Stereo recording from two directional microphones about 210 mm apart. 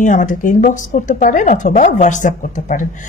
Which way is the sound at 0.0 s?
35° left (ahead or behind).